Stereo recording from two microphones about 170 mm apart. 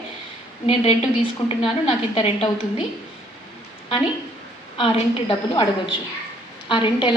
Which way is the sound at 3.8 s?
30° left (ahead or behind).